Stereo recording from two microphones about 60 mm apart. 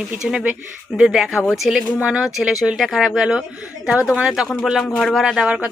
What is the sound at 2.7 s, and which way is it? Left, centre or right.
Speech, centre.